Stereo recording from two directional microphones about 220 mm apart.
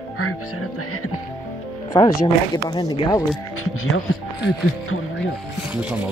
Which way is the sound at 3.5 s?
70° left (ahead or behind).